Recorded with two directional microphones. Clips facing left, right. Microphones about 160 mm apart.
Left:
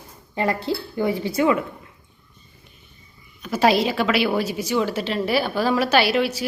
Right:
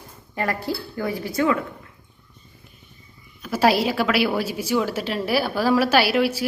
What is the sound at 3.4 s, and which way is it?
A woman's voice, 5° right (ahead or behind).